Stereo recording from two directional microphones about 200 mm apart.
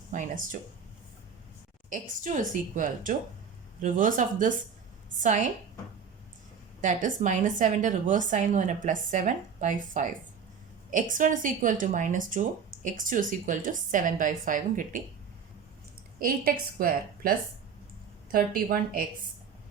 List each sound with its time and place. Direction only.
0.1 s a woman's voice: 40° right (ahead or behind)
1.9 s a woman's voice: 40° right (ahead or behind)
6.8 s a woman's voice: 40° right (ahead or behind)
16.1 s a woman's voice: 45° right (ahead or behind)